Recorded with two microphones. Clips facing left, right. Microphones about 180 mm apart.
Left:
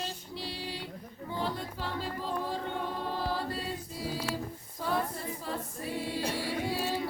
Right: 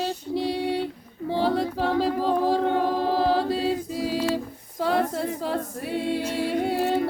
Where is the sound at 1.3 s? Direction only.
85° right.